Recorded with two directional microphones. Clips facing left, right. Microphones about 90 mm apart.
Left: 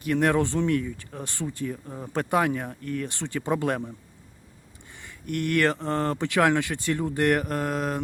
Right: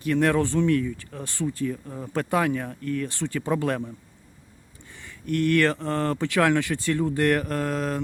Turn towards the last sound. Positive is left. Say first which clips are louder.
# right 1 dB
turn(degrees=15)  # may be behind; listen again after turning